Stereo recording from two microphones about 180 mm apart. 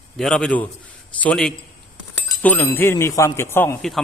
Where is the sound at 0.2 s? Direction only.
5° left (ahead or behind).